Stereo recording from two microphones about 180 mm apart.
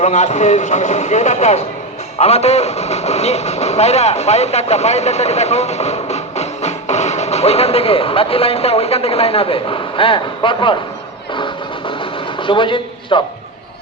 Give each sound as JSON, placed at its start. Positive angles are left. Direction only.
{"t": 0.0, "sound": "a man's voice", "side_deg": 40}
{"t": 11.3, "sound": "vehicle", "side_deg": 25}
{"t": 12.4, "sound": "a man's voice", "side_deg": 30}